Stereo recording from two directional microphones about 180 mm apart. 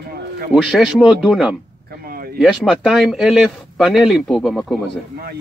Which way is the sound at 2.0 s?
55° right (ahead or behind).